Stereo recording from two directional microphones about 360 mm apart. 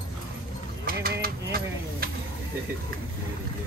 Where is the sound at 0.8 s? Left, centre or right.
Right.